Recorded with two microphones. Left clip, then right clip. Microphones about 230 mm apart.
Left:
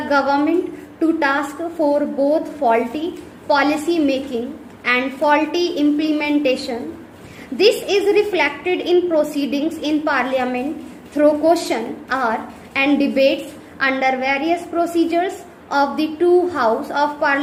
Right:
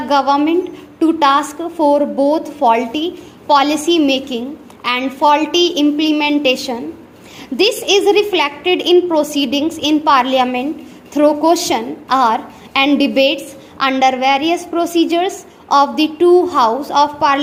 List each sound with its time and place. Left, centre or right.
0.1 s a woman's voice: right